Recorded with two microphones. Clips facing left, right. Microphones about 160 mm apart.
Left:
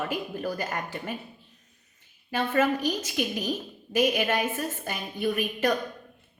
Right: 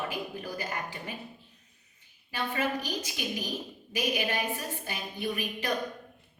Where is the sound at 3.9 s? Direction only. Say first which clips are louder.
Left 6 dB; 50° left (ahead or behind).